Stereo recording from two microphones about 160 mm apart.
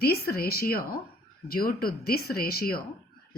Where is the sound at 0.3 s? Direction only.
70° left (ahead or behind).